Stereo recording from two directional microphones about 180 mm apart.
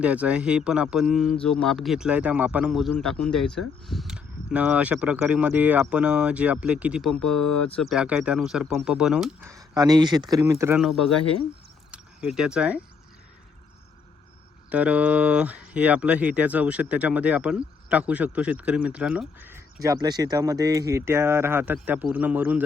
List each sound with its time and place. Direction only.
0.0 s speech: 5° right (ahead or behind)
9.4 s speech: 15° right (ahead or behind)
10.8 s speech: centre (ahead or behind)
11.9 s a sound: 5° right (ahead or behind)
14.7 s speech: 5° right (ahead or behind)